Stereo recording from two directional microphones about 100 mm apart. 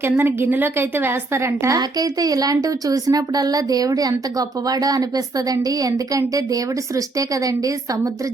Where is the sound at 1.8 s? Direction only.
40° right (ahead or behind).